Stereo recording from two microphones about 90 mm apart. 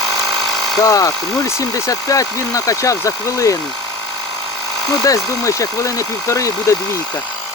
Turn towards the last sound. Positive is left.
turn(degrees=35)  # may be behind; listen again after turning